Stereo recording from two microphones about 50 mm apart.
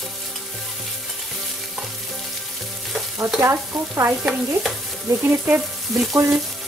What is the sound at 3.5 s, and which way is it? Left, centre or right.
Stir, right.